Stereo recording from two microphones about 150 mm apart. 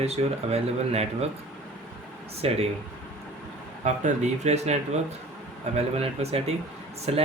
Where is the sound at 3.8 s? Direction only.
50° right (ahead or behind).